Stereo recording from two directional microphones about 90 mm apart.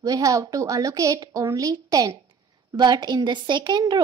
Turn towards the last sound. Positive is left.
turn(degrees=-55)  # may be behind; listen again after turning